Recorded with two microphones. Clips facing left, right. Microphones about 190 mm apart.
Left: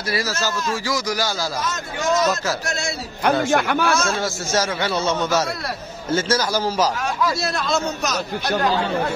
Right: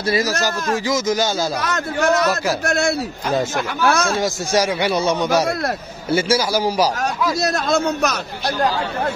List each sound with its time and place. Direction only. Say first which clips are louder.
0.1 s a man's voice: right 4 dB; 15° right (ahead or behind)
1.6 s a man's voice: right 5 dB; 65° right (ahead or behind)
4.2 s a man's voice: right 4 dB; 15° right (ahead or behind)
7.4 s a man's voice: right 4 dB; 45° right (ahead or behind)